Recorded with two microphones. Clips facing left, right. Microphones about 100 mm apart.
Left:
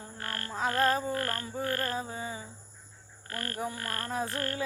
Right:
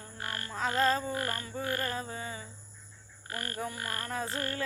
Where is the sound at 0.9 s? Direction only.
15° left (ahead or behind).